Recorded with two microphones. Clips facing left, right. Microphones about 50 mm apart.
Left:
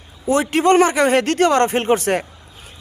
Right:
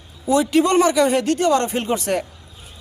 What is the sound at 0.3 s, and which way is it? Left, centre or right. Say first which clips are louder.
Speech: left 1 dB; left.